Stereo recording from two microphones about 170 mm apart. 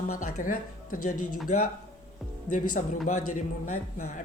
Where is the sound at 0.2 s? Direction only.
50° left (ahead or behind).